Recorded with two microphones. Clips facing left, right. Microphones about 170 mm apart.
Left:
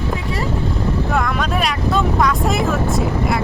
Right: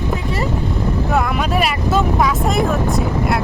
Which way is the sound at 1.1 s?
5° right (ahead or behind).